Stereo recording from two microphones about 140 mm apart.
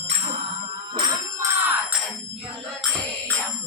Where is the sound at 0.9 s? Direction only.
30° right (ahead or behind).